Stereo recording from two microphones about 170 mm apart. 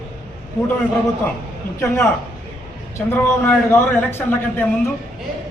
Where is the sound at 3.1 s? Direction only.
15° left (ahead or behind).